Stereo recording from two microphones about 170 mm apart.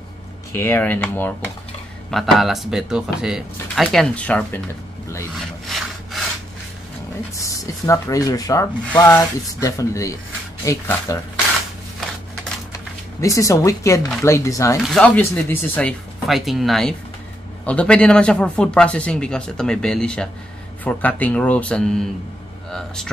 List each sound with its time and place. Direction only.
0.5 s speech: 15° left (ahead or behind)
5.3 s wood: centre (ahead or behind)
7.3 s rub: 20° left (ahead or behind)
12.7 s speech: 20° left (ahead or behind)
14.9 s speech: 5° left (ahead or behind)
16.3 s speech: centre (ahead or behind)